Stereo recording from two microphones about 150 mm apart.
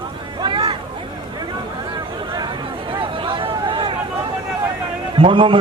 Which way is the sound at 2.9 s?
35° right (ahead or behind).